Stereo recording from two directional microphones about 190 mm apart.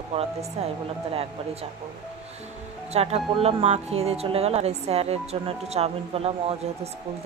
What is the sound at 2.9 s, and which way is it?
Speech, 35° right (ahead or behind).